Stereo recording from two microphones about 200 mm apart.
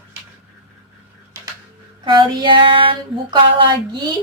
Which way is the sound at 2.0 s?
25° right (ahead or behind).